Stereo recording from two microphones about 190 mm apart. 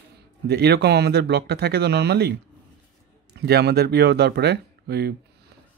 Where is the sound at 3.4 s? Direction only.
60° right (ahead or behind).